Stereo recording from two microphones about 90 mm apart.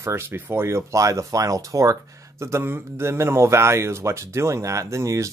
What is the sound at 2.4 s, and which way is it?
Speech, 25° right (ahead or behind).